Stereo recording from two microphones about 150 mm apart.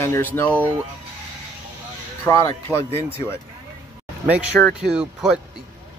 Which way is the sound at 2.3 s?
20° left (ahead or behind).